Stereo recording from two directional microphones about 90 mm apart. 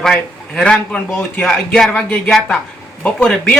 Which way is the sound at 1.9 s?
20° left (ahead or behind).